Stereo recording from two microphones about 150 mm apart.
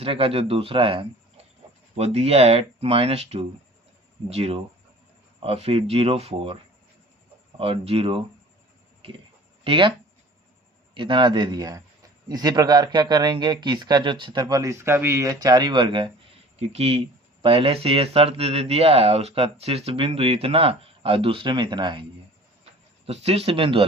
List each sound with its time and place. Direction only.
0.0 s speech: 40° right (ahead or behind)
7.6 s speech: 40° right (ahead or behind)
9.6 s speech: 35° right (ahead or behind)
10.9 s a man's voice: 35° right (ahead or behind)
22.6 s speech: 45° right (ahead or behind)